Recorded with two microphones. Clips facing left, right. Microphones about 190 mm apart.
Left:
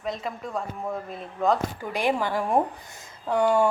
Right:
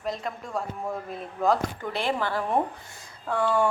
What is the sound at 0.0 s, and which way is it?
A woman's voice, centre (ahead or behind).